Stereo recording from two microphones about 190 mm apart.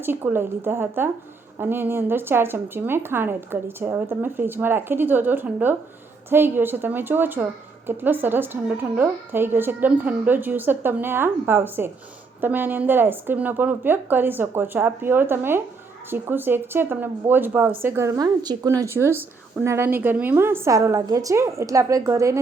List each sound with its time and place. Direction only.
0.0 s speech: 10° right (ahead or behind)